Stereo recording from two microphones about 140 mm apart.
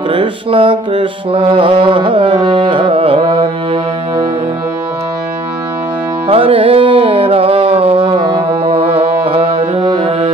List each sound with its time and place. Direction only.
0.1 s mantra: 40° right (ahead or behind)
6.2 s carnatic music: 40° right (ahead or behind)